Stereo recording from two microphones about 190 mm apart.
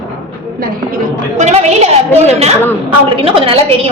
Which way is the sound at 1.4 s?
35° right (ahead or behind).